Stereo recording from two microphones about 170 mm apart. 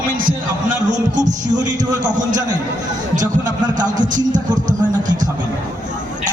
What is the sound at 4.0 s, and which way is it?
Speech, 50° right (ahead or behind).